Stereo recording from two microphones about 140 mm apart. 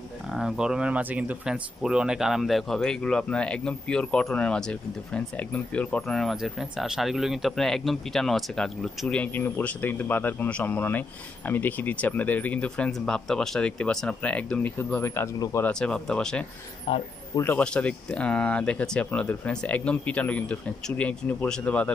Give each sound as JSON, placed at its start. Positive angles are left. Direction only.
{"t": 0.3, "sound": "speech", "side_deg": -5}
{"t": 15.6, "sound": "speech", "side_deg": 5}
{"t": 16.9, "sound": "speech", "side_deg": 35}
{"t": 17.4, "sound": "speech", "side_deg": 10}